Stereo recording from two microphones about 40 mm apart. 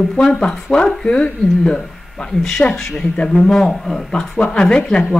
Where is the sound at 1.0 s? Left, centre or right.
Left.